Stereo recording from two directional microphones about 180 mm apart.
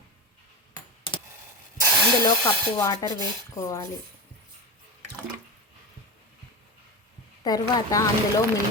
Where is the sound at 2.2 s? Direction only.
20° left (ahead or behind).